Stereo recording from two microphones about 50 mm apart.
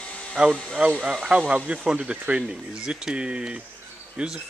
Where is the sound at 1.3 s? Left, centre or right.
Right.